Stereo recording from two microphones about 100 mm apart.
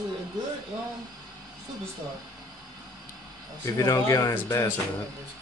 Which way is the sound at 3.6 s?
35° left (ahead or behind).